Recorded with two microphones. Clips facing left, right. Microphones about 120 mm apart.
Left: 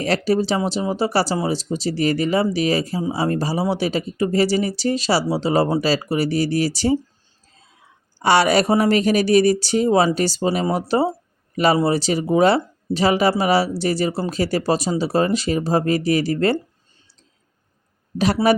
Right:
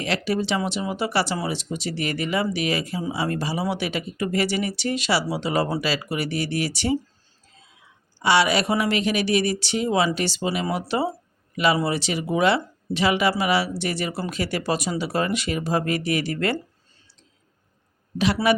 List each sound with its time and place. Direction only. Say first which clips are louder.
0.0 s speech: left 5 dB; 40° left (ahead or behind)
8.2 s speech: left 4 dB; 45° left (ahead or behind)